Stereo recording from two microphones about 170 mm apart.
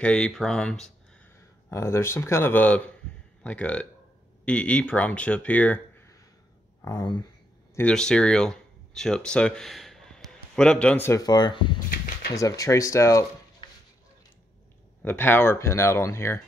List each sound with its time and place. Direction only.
0.0 s speech: 5° left (ahead or behind)
1.7 s speech: 15° left (ahead or behind)
6.8 s speech: 25° left (ahead or behind)
7.7 s speech: 5° left (ahead or behind)
15.0 s speech: 10° left (ahead or behind)